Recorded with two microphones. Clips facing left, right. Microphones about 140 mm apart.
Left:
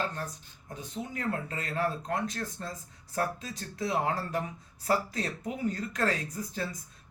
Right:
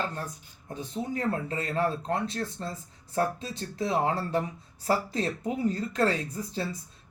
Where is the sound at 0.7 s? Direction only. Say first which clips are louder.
Right 5 dB; 30° right (ahead or behind).